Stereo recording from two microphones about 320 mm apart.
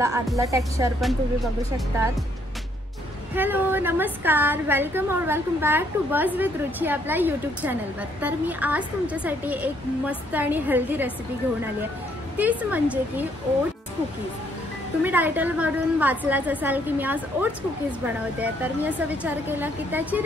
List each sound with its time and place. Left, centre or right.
0.0 s music: centre
3.3 s a woman's voice: centre
12.4 s a woman's voice: centre
15.0 s a woman's voice: centre